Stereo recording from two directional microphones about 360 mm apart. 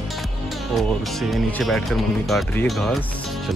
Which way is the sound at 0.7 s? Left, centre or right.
Centre.